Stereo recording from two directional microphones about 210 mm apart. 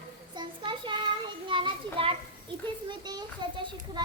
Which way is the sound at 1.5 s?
25° right (ahead or behind).